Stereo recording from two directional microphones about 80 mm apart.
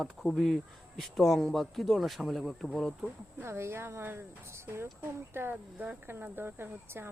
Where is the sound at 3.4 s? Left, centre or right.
Right.